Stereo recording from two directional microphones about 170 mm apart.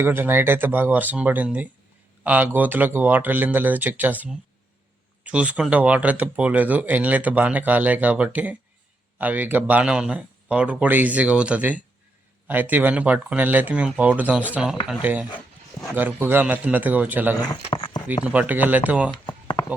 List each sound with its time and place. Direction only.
0.0 s speech: 15° right (ahead or behind)
17.7 s speech: 30° left (ahead or behind)
18.2 s speech: 10° right (ahead or behind)